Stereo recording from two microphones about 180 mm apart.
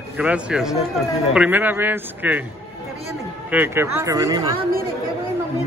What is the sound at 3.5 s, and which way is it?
Speech, 10° right (ahead or behind).